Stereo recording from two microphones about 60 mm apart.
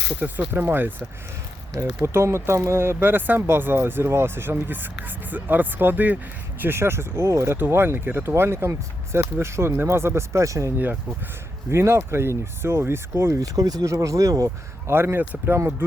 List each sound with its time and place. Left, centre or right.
0.2 s speech: right
7.5 s speech: right
11.7 s speech: right
13.6 s speech: right
14.8 s speech: right